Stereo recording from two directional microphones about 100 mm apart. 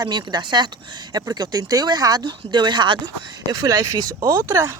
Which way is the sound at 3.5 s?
35° right (ahead or behind).